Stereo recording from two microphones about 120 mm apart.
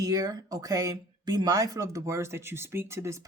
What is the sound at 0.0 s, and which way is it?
Speech, 35° right (ahead or behind).